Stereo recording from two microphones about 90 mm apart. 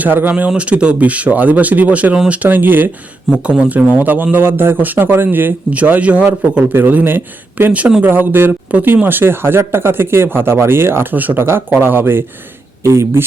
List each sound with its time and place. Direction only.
0.0 s speech: 20° right (ahead or behind)
3.3 s speech: 10° right (ahead or behind); by 13.2 s 30° right (ahead or behind)